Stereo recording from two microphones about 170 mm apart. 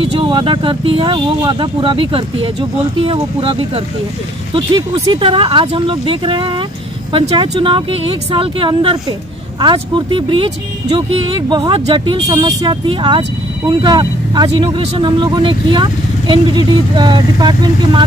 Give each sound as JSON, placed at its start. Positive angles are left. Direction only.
{"t": 0.0, "sound": "speech", "side_deg": -30}